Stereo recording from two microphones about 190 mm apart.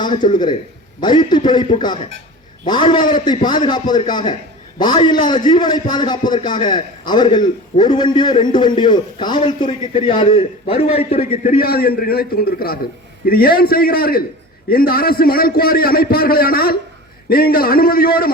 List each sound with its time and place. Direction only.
0.0 s a man's voice: 25° left (ahead or behind)
11.4 s a man's voice: 50° left (ahead or behind)